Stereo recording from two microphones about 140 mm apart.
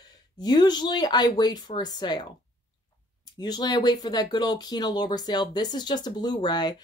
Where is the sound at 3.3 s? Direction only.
30° left (ahead or behind).